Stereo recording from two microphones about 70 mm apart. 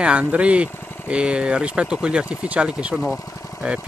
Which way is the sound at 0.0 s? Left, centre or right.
Centre.